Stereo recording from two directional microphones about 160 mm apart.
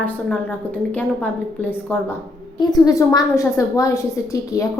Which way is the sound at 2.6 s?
20° left (ahead or behind).